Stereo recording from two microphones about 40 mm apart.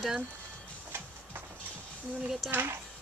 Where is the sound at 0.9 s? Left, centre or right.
Right.